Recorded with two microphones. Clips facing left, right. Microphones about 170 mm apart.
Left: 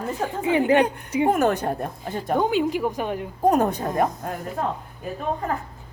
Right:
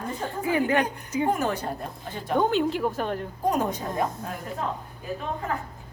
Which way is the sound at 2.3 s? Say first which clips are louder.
Left 1 dB; 5° left (ahead or behind).